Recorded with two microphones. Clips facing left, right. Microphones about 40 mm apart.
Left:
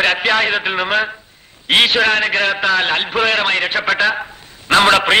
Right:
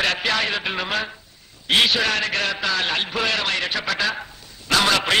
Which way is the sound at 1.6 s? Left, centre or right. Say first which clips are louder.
Left 5 dB; left.